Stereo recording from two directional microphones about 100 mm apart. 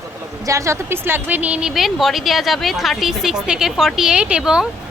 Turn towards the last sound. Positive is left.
turn(degrees=-10)  # may be behind; listen again after turning